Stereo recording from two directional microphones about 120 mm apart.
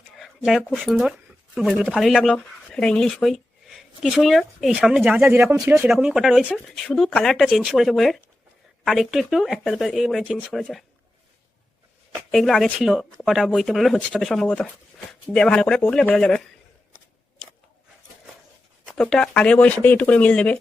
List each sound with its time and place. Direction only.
0.2 s speech: centre (ahead or behind)
5.3 s speech: 20° right (ahead or behind)
5.9 s speech: 5° right (ahead or behind)
12.3 s speech: centre (ahead or behind)
18.9 s speech: 5° left (ahead or behind)